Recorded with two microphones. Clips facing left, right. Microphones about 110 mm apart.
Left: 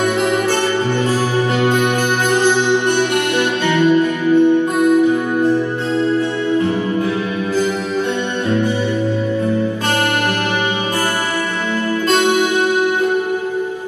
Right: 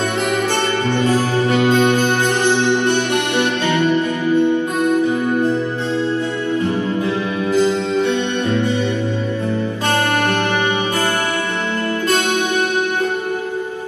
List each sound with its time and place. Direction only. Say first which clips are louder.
1.5 s music: right 3 dB; 15° left (ahead or behind)
3.3 s music: left 1 dB; 20° right (ahead or behind)
3.8 s music: left 3 dB; 15° left (ahead or behind)